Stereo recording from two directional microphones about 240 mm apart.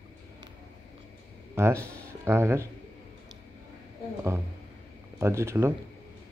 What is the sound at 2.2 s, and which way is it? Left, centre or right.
Mantra, centre.